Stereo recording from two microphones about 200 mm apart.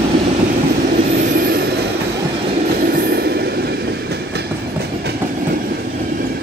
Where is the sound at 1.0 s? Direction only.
45° right (ahead or behind).